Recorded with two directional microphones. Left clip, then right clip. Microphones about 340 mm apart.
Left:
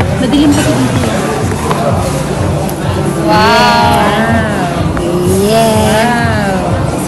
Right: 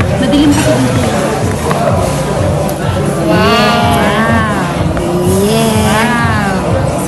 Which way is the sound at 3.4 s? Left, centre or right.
Centre.